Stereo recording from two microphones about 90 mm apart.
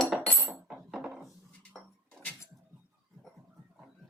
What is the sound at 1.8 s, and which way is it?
Music, 5° right (ahead or behind).